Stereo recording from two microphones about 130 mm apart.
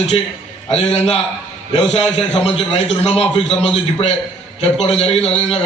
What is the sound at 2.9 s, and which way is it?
Speech, 55° left (ahead or behind).